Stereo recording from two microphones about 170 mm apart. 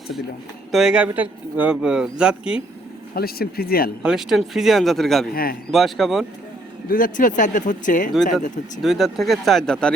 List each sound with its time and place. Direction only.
0.7 s speech: 5° right (ahead or behind)
3.2 s speech: 65° left (ahead or behind)
4.0 s speech: 5° right (ahead or behind)
5.3 s speech: 60° left (ahead or behind)
5.7 s speech: centre (ahead or behind)
6.8 s speech: 55° left (ahead or behind)
8.8 s speech: centre (ahead or behind)